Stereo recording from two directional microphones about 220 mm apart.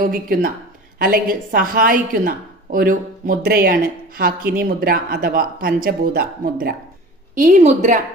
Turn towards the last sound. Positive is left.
turn(degrees=-35)  # may be behind; listen again after turning